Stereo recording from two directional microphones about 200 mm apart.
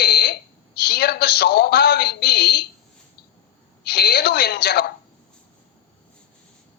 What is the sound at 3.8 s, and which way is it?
A woman's voice, 55° left (ahead or behind).